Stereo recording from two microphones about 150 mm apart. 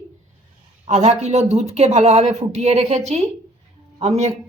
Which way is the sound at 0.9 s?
45° right (ahead or behind).